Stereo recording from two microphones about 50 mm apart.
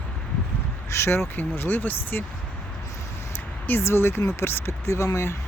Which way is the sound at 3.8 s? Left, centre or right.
Left.